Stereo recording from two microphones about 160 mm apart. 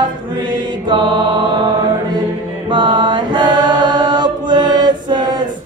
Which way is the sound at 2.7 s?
30° right (ahead or behind).